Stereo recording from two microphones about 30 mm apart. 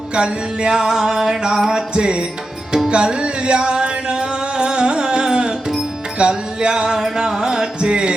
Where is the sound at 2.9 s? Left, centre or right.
Right.